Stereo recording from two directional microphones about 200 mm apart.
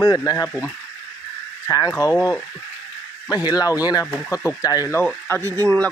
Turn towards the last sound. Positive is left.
turn(degrees=10)  # may be behind; listen again after turning